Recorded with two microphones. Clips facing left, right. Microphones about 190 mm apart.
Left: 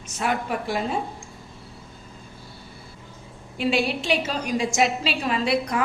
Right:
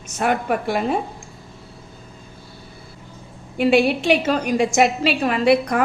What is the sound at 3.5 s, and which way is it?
A woman's voice, 55° right (ahead or behind).